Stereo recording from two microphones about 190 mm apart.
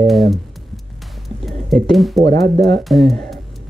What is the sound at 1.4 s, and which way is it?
Speech, centre (ahead or behind).